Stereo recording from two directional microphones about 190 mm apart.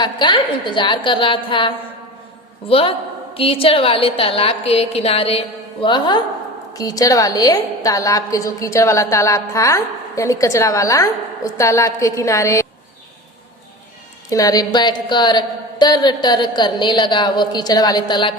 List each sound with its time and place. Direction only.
0.0 s a woman's voice: 25° left (ahead or behind)
14.3 s a woman's voice: 20° left (ahead or behind)